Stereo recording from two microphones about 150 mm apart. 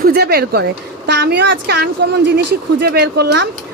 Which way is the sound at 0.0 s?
90° right.